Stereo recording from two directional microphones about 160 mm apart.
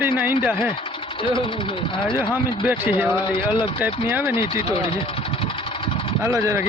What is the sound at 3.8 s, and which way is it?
Speech, 15° right (ahead or behind).